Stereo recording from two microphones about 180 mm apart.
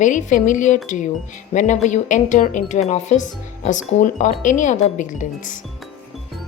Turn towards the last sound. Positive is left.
turn(degrees=45)  # may be behind; listen again after turning